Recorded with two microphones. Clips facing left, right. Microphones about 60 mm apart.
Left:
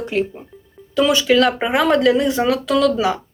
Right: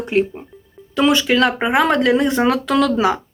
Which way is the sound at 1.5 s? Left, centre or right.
Centre.